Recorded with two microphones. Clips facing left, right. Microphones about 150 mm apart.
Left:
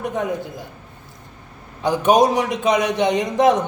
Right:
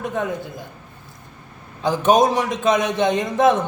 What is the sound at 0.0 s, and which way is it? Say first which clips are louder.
Speech: left 1 dB; 15° left (ahead or behind).